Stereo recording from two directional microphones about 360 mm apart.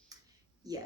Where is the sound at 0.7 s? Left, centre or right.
Centre.